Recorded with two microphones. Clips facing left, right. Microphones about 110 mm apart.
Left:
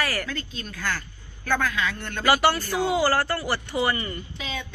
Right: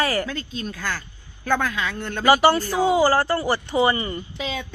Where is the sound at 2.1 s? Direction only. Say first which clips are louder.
Right 5 dB; 15° right (ahead or behind); by 4.5 s 30° right (ahead or behind).